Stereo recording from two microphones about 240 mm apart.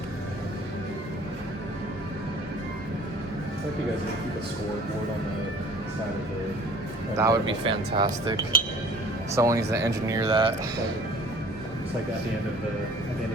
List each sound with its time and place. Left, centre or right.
7.2 s speech: centre